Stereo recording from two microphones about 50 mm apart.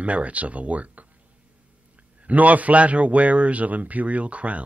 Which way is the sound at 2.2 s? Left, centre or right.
Right.